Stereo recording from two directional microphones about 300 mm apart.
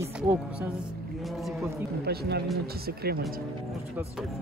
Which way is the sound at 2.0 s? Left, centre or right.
Right.